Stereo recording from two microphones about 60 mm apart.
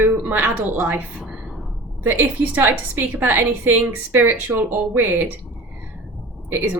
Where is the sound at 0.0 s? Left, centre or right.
Right.